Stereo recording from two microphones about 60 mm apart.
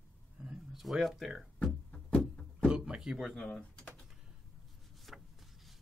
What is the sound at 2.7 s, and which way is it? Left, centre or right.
Speech, centre.